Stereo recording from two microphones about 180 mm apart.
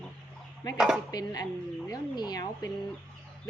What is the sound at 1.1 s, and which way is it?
A woman's voice, 20° left (ahead or behind).